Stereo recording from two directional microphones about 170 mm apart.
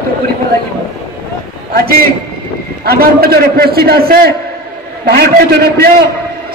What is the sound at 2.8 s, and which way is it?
A man's voice, 65° right (ahead or behind).